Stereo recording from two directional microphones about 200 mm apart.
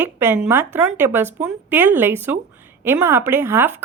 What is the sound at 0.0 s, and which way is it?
Speech, 10° right (ahead or behind).